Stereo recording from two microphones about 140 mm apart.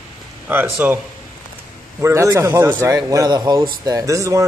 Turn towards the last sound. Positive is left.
turn(degrees=-25)  # may be behind; listen again after turning